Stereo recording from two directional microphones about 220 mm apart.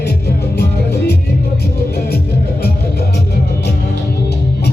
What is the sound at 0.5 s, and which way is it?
Music, 50° left (ahead or behind).